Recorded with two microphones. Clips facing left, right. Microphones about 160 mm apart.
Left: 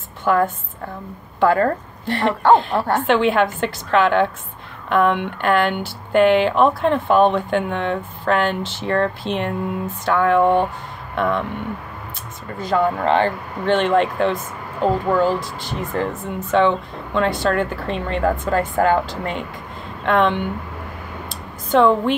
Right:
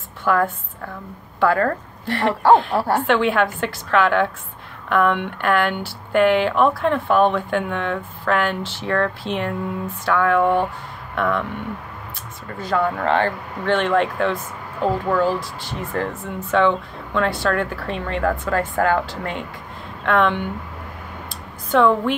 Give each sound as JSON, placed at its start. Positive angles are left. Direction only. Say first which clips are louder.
{"t": 0.2, "sound": "a woman's voice", "louder": "left 2 dB", "side_deg": 20}
{"t": 2.2, "sound": "speech", "louder": "even", "side_deg": -10}
{"t": 3.1, "sound": "speech", "louder": "left 4 dB", "side_deg": 20}
{"t": 12.5, "sound": "speech", "louder": "left 2 dB", "side_deg": 20}
{"t": 21.3, "sound": "a sound", "louder": "left 2 dB", "side_deg": 25}